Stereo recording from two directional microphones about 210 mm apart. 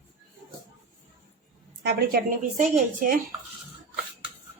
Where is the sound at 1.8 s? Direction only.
50° right (ahead or behind).